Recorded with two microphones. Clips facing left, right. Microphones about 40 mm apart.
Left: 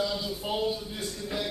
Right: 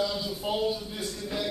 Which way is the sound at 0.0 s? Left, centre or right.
Centre.